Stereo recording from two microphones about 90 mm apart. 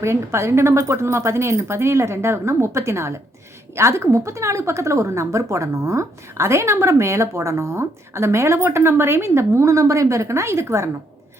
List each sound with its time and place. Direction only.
0.0 s a woman's voice: 30° right (ahead or behind)